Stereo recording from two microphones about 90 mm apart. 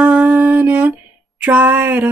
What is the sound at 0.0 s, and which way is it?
Music, 15° right (ahead or behind).